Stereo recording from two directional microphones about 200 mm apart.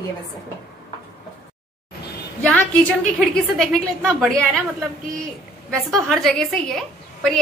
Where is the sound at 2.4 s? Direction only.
5° left (ahead or behind).